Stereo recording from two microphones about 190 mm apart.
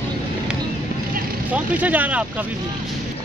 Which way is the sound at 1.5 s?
5° right (ahead or behind).